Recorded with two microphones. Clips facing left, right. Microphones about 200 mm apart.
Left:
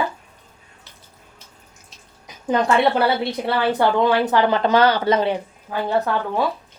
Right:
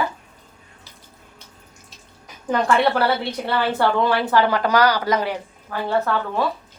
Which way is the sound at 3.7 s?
15° left (ahead or behind).